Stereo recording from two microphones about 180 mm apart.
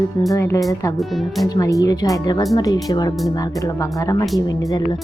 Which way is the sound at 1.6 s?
20° left (ahead or behind).